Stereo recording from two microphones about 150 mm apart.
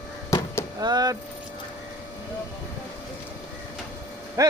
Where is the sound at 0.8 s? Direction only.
25° right (ahead or behind).